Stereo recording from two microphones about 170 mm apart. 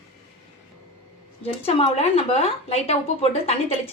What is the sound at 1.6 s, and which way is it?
Speech, 35° left (ahead or behind).